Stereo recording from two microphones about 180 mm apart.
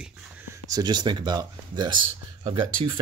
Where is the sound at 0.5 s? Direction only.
20° right (ahead or behind).